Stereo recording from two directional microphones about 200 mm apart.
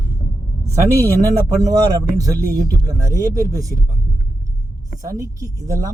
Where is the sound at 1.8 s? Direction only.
15° right (ahead or behind).